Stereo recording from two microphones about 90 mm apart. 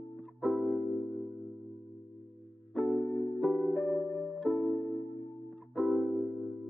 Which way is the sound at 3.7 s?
15° left (ahead or behind).